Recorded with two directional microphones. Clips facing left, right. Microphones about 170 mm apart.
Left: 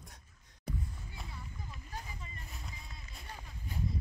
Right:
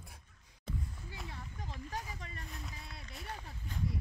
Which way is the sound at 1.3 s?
85° right.